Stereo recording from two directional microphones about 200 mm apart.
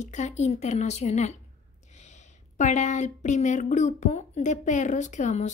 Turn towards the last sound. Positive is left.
turn(degrees=35)  # may be behind; listen again after turning